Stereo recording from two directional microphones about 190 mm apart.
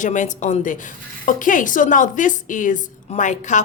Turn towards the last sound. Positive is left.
turn(degrees=40)  # may be behind; listen again after turning